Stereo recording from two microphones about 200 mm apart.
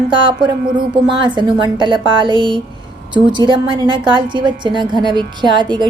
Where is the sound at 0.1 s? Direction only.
25° right (ahead or behind).